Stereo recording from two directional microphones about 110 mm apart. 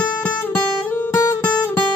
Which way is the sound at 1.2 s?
15° left (ahead or behind).